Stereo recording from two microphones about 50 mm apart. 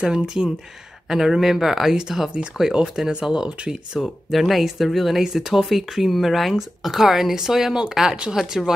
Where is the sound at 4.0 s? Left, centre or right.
Centre.